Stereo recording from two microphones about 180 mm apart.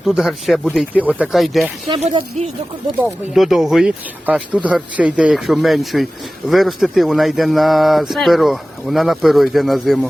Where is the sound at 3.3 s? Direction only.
Centre (ahead or behind).